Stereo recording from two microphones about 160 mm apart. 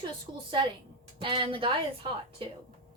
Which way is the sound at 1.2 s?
30° right (ahead or behind).